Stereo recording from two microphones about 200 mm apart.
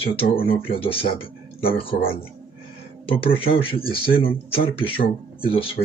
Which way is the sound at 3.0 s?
30° left (ahead or behind).